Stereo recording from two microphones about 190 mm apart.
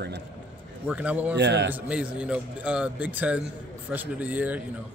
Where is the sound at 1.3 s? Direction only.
65° right (ahead or behind).